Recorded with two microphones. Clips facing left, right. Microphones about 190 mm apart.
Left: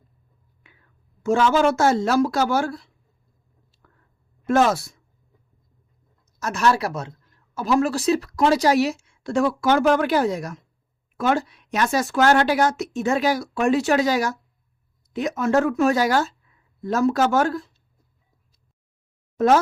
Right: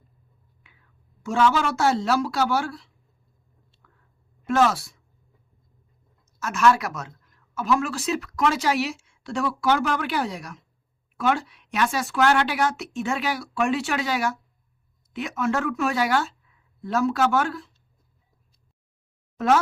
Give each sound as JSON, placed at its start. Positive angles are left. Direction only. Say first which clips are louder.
{"t": 1.2, "sound": "speech", "louder": "left 4 dB", "side_deg": 45}
{"t": 4.4, "sound": "speech", "louder": "left 2 dB", "side_deg": 45}
{"t": 6.4, "sound": "speech", "louder": "even", "side_deg": 35}